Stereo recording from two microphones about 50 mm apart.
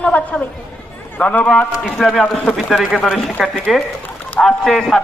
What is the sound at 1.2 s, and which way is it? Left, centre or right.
Speech, left.